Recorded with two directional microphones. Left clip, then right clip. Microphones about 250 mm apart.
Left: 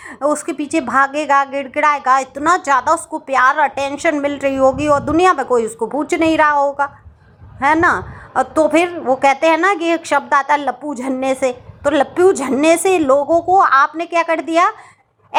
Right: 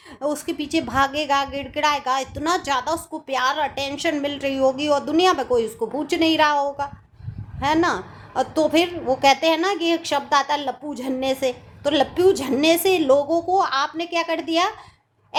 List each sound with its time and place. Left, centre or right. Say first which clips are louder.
0.2 s a woman's voice: left 7 dB; centre